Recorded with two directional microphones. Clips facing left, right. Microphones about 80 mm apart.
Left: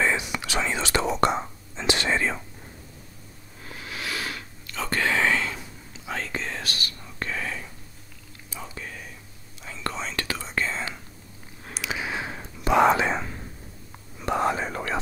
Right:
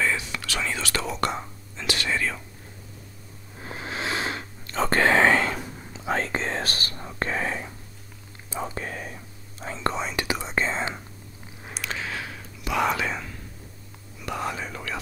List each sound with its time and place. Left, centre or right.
0.0 s whispering: left
3.5 s whispering: right
9.6 s whispering: right
9.9 s whispering: centre
11.6 s a sound: centre
12.0 s whispering: left